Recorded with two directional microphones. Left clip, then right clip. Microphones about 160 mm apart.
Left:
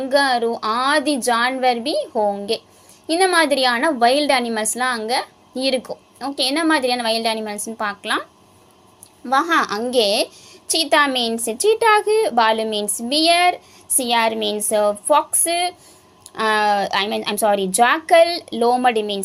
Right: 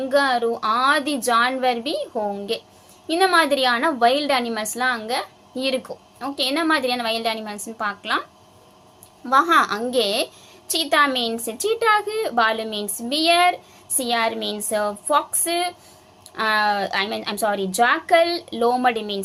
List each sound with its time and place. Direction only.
0.0 s a woman's voice: 25° left (ahead or behind)
9.2 s a woman's voice: 25° left (ahead or behind)